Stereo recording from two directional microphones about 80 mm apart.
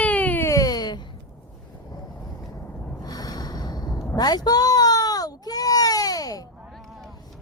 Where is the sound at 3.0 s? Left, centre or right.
Left.